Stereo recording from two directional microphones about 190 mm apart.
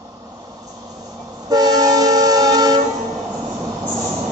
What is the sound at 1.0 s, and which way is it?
Train, 20° right (ahead or behind).